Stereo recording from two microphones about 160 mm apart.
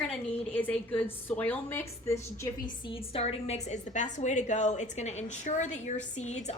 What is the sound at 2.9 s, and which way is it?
A woman's voice, 40° left (ahead or behind).